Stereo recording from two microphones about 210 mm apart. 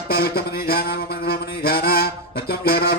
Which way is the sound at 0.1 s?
45° left (ahead or behind).